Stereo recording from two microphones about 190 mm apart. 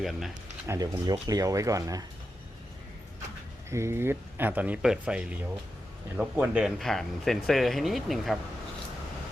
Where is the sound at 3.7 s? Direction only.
15° right (ahead or behind).